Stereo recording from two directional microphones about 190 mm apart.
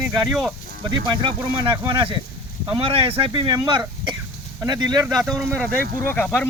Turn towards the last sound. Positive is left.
turn(degrees=0)  # may be behind; listen again after turning